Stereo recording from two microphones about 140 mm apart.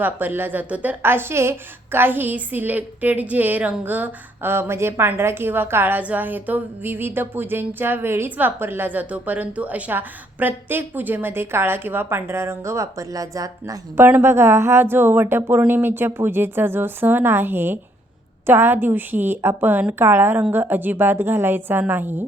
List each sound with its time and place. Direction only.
0.0 s a woman's voice: 15° right (ahead or behind)